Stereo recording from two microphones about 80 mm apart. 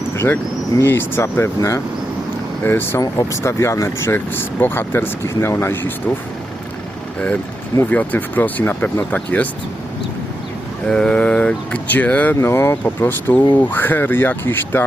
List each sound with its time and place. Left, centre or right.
0.8 s speech: left
3.0 s speech: left
7.9 s speech: centre
10.8 s speech: centre
12.4 s speech: left